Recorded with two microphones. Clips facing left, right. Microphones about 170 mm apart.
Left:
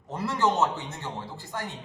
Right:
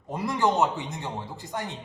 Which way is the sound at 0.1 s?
15° right (ahead or behind).